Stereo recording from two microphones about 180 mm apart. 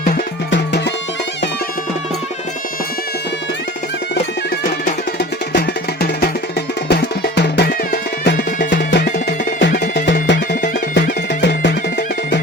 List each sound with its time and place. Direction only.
0.5 s music: 75° left (ahead or behind)
5.5 s music: 60° left (ahead or behind)